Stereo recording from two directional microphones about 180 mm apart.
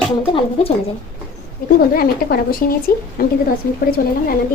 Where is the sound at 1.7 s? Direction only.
55° left (ahead or behind).